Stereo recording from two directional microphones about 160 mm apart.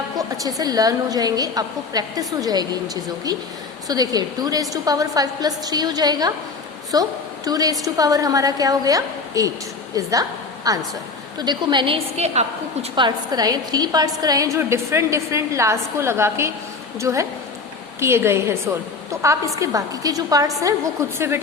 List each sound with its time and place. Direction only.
0.2 s a woman's voice: 25° right (ahead or behind); by 12.5 s 40° right (ahead or behind)
13.0 s a woman's voice: 25° right (ahead or behind)